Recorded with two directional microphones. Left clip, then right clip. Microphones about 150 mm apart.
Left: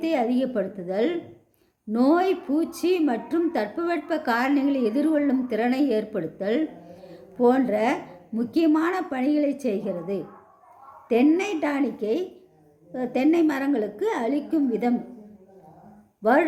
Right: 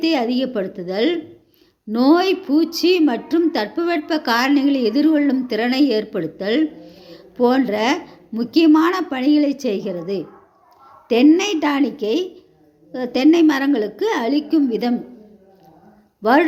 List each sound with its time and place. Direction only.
0.0 s a woman's voice: 15° right (ahead or behind)